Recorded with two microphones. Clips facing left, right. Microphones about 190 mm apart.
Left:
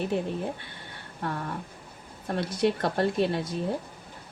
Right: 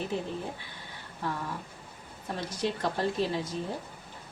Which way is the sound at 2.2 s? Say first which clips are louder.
Left 6 dB; 60° left (ahead or behind).